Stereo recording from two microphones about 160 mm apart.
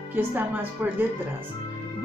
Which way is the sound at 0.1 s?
10° right (ahead or behind).